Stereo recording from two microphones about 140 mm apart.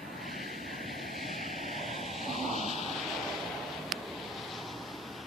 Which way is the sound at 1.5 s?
55° left (ahead or behind).